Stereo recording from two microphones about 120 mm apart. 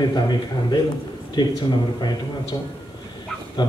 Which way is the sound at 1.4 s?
35° left (ahead or behind).